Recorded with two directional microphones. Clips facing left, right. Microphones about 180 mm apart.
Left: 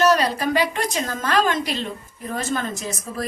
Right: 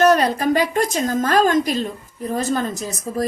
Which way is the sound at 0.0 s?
50° right (ahead or behind).